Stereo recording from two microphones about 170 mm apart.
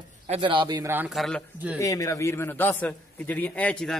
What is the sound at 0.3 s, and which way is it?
Speech, 30° right (ahead or behind).